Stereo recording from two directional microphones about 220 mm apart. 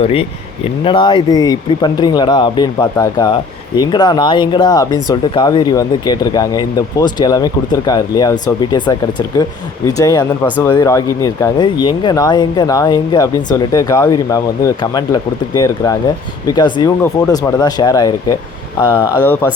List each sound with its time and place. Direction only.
0.0 s speech: 25° left (ahead or behind)